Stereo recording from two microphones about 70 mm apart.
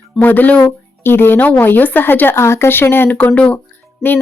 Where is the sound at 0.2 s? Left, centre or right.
Left.